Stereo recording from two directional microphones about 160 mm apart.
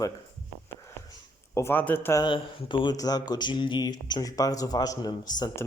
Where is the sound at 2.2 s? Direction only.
30° left (ahead or behind).